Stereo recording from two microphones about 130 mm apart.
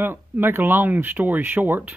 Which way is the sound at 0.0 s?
15° right (ahead or behind).